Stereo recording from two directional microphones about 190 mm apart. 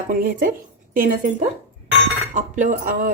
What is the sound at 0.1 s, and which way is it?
Speech, 50° right (ahead or behind).